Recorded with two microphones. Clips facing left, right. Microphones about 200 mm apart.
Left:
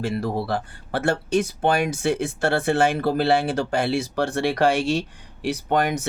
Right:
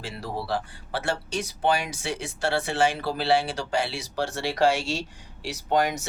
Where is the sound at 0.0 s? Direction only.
55° left (ahead or behind).